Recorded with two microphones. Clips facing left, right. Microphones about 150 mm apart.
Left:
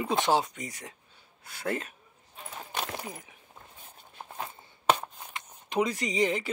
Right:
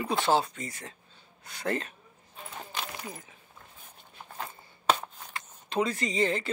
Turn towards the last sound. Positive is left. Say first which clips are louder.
# even
turn(degrees=15)  # may be behind; listen again after turning